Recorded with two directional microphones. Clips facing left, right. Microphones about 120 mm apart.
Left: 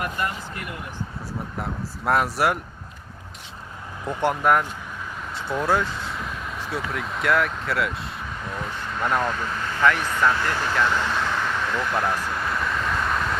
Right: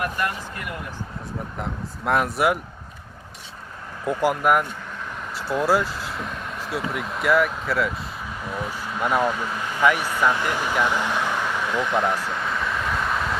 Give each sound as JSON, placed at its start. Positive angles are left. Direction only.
{"t": 2.0, "sound": "speech", "side_deg": 0}
{"t": 4.0, "sound": "speech", "side_deg": -5}
{"t": 12.4, "sound": "vehicle", "side_deg": 0}